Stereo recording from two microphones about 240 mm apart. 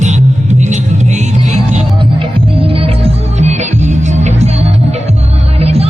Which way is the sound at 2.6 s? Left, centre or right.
Right.